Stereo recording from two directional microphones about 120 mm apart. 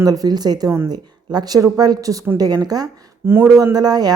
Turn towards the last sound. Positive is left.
turn(degrees=-35)  # may be behind; listen again after turning